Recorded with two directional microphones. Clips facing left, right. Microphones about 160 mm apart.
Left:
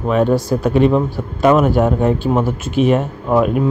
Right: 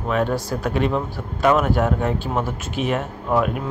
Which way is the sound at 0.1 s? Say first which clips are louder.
Left 7 dB; 20° left (ahead or behind).